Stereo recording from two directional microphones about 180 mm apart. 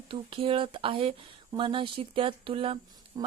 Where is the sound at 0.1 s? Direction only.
30° right (ahead or behind).